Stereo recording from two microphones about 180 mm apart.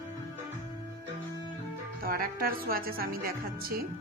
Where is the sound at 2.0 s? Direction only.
55° right (ahead or behind).